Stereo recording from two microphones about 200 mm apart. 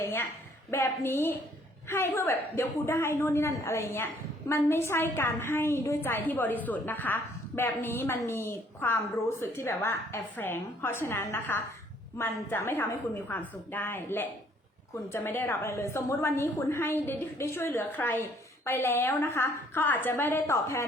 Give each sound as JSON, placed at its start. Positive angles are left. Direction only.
{"t": 0.0, "sound": "a woman's voice", "side_deg": 10}